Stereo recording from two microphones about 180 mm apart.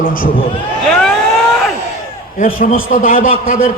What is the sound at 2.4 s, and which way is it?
A man's voice, 45° left (ahead or behind).